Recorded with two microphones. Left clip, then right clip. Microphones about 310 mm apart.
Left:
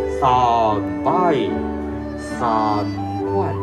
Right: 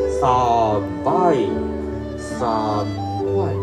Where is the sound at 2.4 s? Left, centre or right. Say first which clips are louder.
Left 3 dB; left.